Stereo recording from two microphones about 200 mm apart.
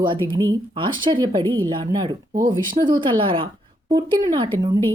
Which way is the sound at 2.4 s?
45° right (ahead or behind).